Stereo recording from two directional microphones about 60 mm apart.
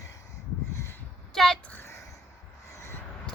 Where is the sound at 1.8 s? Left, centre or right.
Left.